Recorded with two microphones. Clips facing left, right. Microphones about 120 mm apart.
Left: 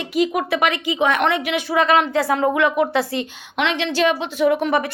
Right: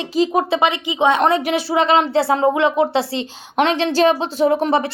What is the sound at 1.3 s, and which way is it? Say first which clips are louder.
A woman's voice: right 3 dB; 35° right (ahead or behind).